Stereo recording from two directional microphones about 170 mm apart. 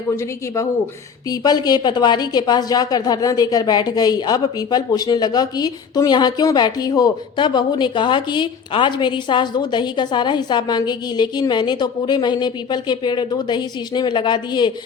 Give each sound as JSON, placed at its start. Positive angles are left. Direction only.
{"t": 0.2, "sound": "a man's voice", "side_deg": 15}